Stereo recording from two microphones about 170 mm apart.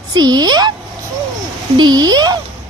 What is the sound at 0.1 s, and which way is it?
Speech, 25° right (ahead or behind).